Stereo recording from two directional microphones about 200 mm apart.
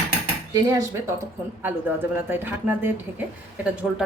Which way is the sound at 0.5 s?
15° right (ahead or behind).